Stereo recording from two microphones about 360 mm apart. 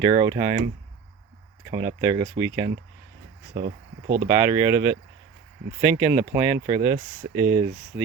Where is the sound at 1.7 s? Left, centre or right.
Centre.